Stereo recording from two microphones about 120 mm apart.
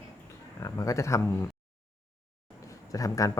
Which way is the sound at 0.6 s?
25° left (ahead or behind).